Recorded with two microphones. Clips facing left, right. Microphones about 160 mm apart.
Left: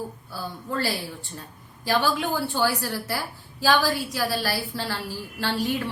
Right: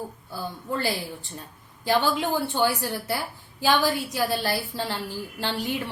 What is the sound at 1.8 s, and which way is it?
Speech, 20° right (ahead or behind).